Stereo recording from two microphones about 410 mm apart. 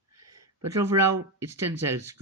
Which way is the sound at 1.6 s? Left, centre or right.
Right.